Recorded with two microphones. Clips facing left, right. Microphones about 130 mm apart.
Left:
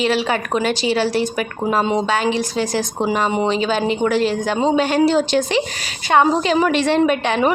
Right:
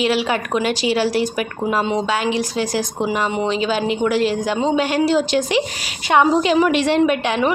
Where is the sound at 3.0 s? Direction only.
35° left (ahead or behind).